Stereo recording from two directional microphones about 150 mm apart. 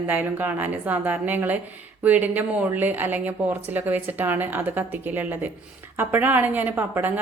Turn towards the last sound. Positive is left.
turn(degrees=-10)  # may be behind; listen again after turning